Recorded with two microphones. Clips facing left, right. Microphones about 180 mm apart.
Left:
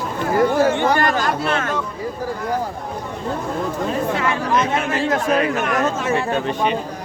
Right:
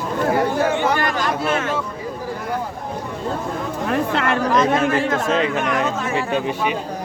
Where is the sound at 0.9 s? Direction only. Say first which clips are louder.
Left 3 dB; 45° left (ahead or behind).